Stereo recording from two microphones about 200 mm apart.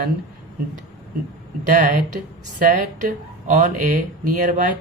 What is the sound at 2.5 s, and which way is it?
Speech, 40° right (ahead or behind).